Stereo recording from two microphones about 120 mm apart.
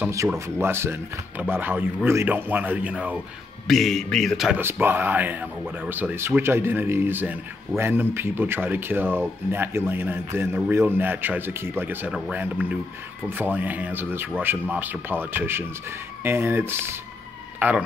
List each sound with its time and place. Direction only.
0.6 s speech: 20° right (ahead or behind)
3.6 s speech: centre (ahead or behind)
4.6 s speech: 20° right (ahead or behind)